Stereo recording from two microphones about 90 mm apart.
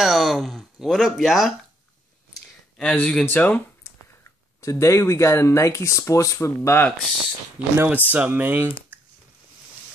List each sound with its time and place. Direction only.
0.0 s speech: centre (ahead or behind)
2.8 s speech: 10° left (ahead or behind)
4.6 s speech: 30° left (ahead or behind)
7.7 s speech: 25° right (ahead or behind)